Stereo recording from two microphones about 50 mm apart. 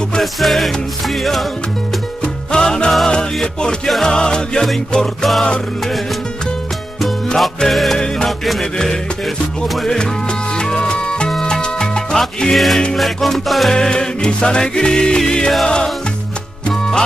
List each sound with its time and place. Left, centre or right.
0.2 s music: centre
2.2 s music: centre
7.3 s music: centre
10.5 s music: centre
11.3 s music: centre
11.6 s salsa music: centre
12.5 s music: centre
13.7 s music: centre